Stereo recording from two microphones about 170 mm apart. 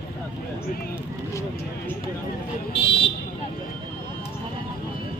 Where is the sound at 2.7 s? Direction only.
30° left (ahead or behind).